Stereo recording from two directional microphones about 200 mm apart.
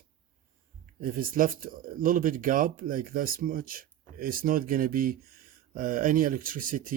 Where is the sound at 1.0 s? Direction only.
45° right (ahead or behind).